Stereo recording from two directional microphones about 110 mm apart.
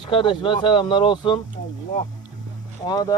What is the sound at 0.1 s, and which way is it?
Speech, 50° left (ahead or behind).